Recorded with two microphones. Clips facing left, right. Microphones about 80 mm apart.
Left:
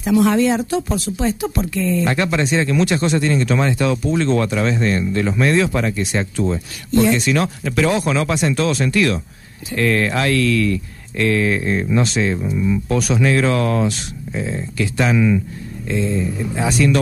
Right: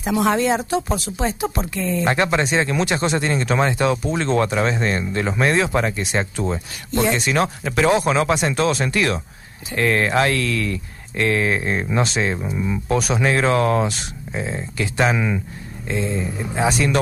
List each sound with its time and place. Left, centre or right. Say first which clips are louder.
0.0 s speech: left 4 dB; centre
1.8 s speech: left 1 dB; centre
12.8 s speech: left 1 dB; centre
13.2 s speech: even; right